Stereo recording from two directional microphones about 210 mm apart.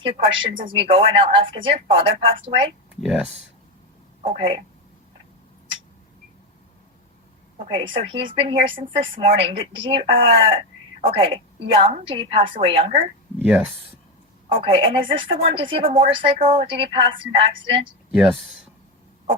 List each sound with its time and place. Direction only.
0.0 s speech: 25° right (ahead or behind)
2.9 s speech: 5° right (ahead or behind)
4.2 s speech: 30° right (ahead or behind)
7.6 s speech: 25° right (ahead or behind)
13.4 s speech: 5° right (ahead or behind)
14.5 s speech: 25° right (ahead or behind)